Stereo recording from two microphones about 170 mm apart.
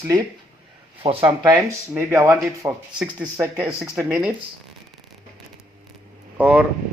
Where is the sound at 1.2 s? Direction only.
20° right (ahead or behind).